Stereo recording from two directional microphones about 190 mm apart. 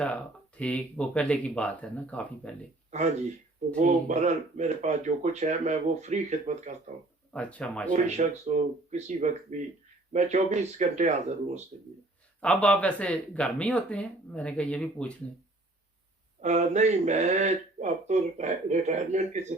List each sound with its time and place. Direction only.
0.0 s speech: 5° left (ahead or behind)
3.8 s speech: 40° right (ahead or behind)
7.3 s speech: 5° left (ahead or behind)
7.9 s speech: 35° right (ahead or behind)
12.4 s speech: 5° left (ahead or behind)
16.4 s speech: 35° right (ahead or behind)